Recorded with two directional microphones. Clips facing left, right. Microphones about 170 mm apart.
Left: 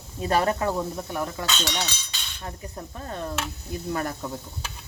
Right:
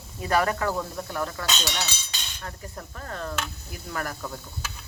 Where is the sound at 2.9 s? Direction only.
20° left (ahead or behind).